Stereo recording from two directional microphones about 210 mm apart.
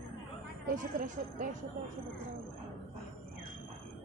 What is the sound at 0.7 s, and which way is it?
Speech, 35° right (ahead or behind).